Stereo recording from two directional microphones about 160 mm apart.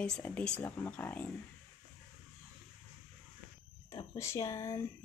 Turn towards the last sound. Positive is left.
turn(degrees=20)  # may be behind; listen again after turning